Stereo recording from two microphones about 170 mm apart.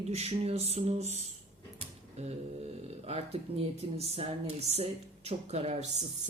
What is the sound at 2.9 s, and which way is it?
Speech, 35° right (ahead or behind).